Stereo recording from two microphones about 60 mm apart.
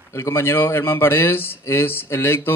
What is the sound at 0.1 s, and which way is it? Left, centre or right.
Speech, left.